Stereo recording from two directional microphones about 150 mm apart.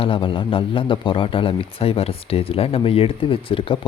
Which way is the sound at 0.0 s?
35° left (ahead or behind).